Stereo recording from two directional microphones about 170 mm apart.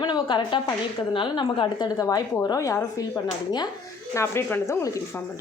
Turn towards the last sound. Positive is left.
turn(degrees=15)  # may be behind; listen again after turning